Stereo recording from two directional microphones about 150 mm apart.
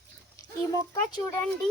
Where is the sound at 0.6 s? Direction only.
20° left (ahead or behind).